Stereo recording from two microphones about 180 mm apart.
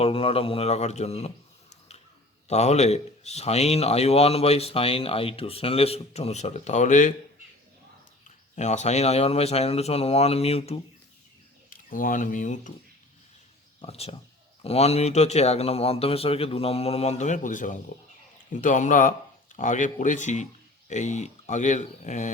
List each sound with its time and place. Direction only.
0.0 s speech: 30° left (ahead or behind)
2.5 s speech: 40° left (ahead or behind)
8.5 s speech: 40° left (ahead or behind)
11.7 s speech: 50° left (ahead or behind)
13.8 s speech: 35° left (ahead or behind)